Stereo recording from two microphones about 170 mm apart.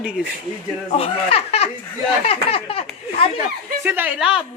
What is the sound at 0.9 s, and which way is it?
Speech, 35° left (ahead or behind).